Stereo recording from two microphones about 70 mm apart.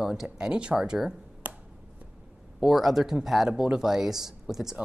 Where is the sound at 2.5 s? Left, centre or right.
Centre.